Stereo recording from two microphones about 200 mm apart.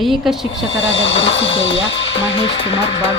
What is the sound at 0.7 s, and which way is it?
Speech, 70° left (ahead or behind).